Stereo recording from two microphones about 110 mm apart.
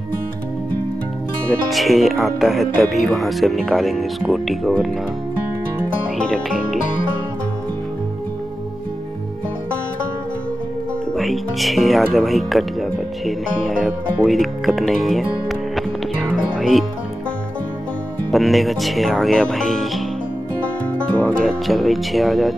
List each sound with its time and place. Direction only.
1.7 s speech: centre (ahead or behind)
6.2 s speech: 5° left (ahead or behind)
11.1 s speech: centre (ahead or behind)
13.2 s music: centre (ahead or behind)
18.3 s speech: centre (ahead or behind)
21.2 s music: 10° left (ahead or behind)
21.6 s speech: centre (ahead or behind)